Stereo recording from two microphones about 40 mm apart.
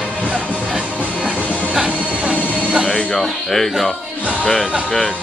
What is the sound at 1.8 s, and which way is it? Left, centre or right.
Train, right.